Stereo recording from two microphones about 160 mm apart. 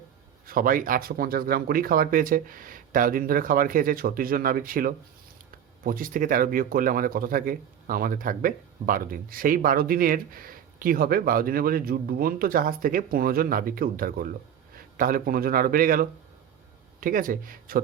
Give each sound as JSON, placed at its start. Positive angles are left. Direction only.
{"t": 0.4, "sound": "speech", "side_deg": -60}